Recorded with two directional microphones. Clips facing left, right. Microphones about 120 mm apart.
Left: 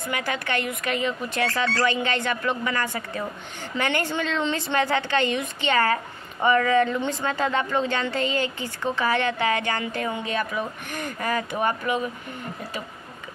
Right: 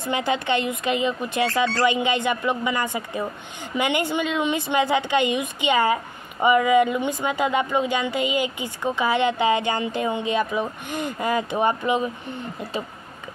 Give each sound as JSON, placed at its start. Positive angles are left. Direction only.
{"t": 0.1, "sound": "speech", "side_deg": -20}